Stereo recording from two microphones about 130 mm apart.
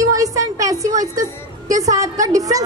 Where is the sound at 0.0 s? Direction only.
25° right (ahead or behind).